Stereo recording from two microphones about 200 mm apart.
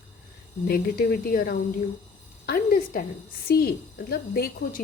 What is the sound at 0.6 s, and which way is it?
A woman's voice, 50° left (ahead or behind).